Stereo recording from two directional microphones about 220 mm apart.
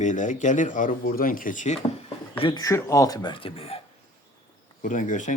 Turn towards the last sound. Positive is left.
turn(degrees=35)  # may be behind; listen again after turning